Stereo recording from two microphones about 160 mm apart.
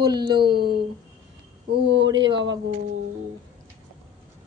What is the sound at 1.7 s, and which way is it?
Speech, 90° right.